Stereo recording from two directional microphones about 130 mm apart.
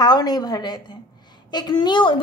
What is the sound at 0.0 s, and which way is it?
A woman's voice, 30° left (ahead or behind).